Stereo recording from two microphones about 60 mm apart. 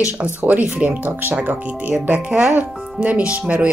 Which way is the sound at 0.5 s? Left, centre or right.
Right.